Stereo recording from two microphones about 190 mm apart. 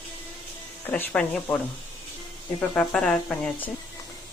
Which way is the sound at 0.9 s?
10° left (ahead or behind).